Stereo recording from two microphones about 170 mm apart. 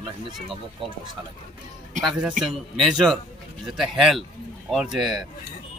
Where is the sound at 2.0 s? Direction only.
Centre (ahead or behind).